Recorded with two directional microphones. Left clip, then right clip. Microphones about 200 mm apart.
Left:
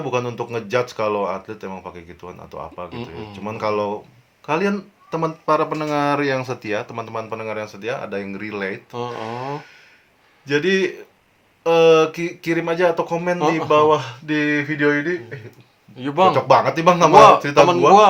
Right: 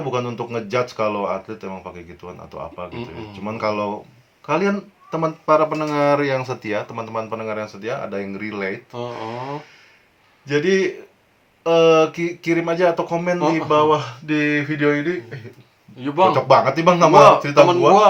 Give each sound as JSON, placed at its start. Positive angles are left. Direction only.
{"t": 0.1, "sound": "a man's voice", "side_deg": 35}